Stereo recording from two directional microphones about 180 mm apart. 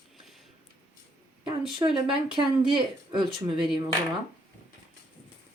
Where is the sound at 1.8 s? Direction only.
25° right (ahead or behind).